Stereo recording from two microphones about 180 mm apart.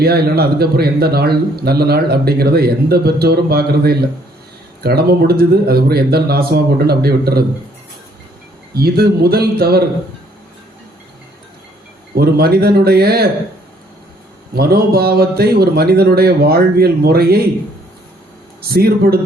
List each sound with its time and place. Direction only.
0.0 s speech: 60° right (ahead or behind)
8.7 s speech: 60° right (ahead or behind)
12.1 s speech: 60° right (ahead or behind)
14.5 s speech: 60° right (ahead or behind)
18.7 s speech: 60° right (ahead or behind)